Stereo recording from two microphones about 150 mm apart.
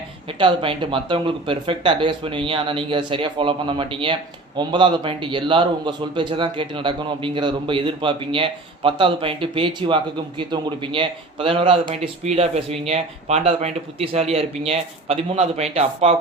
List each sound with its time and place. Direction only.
0.3 s speech: 35° right (ahead or behind)